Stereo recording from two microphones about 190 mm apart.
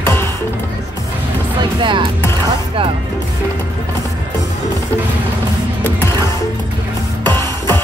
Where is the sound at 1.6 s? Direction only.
25° right (ahead or behind).